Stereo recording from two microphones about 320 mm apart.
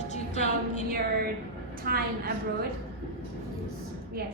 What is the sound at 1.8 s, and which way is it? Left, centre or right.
Speech, right.